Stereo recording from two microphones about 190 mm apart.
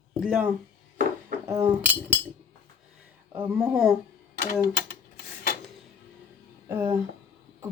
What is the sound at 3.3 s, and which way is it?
Speech, 5° right (ahead or behind).